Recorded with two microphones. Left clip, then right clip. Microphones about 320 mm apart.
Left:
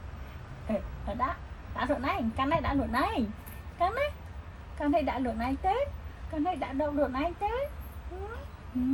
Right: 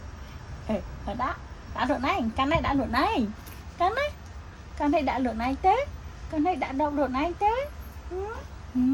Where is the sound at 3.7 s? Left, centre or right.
Right.